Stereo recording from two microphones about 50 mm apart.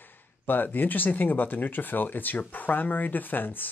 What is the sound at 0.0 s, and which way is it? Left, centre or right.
Speech, left.